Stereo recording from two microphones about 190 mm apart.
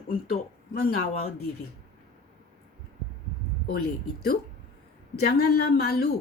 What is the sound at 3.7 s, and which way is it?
A woman's voice, 55° left (ahead or behind).